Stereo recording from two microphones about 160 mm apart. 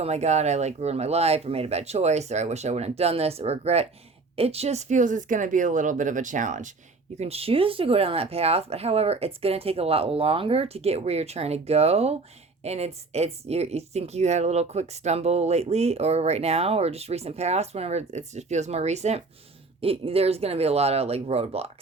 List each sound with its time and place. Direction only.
0.0 s speech: 45° right (ahead or behind)
7.2 s speech: 40° right (ahead or behind)